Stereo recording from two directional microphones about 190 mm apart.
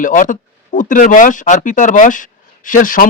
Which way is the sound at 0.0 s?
45° left (ahead or behind).